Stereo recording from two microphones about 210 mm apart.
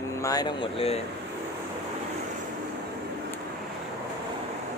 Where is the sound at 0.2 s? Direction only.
15° left (ahead or behind).